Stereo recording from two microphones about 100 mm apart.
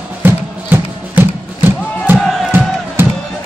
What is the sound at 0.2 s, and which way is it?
Music, 20° right (ahead or behind).